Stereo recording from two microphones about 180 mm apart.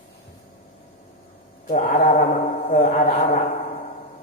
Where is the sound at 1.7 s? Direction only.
45° left (ahead or behind).